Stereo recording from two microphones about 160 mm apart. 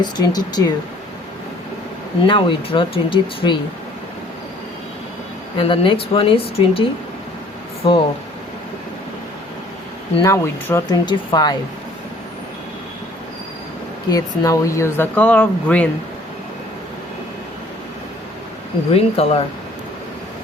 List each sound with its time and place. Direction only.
0.0 s speech: 25° left (ahead or behind)
2.2 s speech: 30° left (ahead or behind)
5.5 s speech: 35° left (ahead or behind)
7.8 s speech: 30° left (ahead or behind)
10.2 s speech: 15° left (ahead or behind)
10.8 s speech: 25° left (ahead or behind)
14.1 s speech: 20° left (ahead or behind)
18.9 s speech: 40° left (ahead or behind)